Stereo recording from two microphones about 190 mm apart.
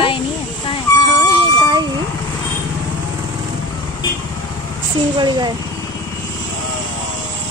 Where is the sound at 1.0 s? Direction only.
25° left (ahead or behind).